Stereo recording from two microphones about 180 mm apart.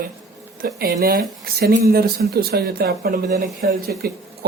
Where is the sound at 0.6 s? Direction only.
55° right (ahead or behind).